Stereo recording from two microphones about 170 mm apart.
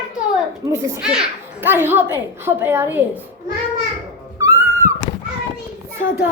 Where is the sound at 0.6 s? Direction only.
15° right (ahead or behind).